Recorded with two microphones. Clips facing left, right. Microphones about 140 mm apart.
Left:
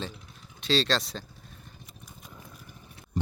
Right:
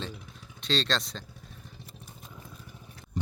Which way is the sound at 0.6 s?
5° left (ahead or behind).